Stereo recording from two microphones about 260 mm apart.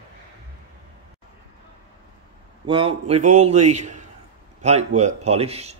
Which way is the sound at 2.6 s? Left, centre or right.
Centre.